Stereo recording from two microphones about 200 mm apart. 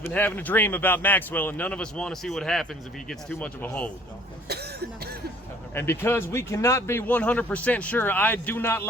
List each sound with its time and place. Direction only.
0.1 s speech: 10° left (ahead or behind)
4.4 s a sound: 55° right (ahead or behind)
5.7 s speech: 10° left (ahead or behind)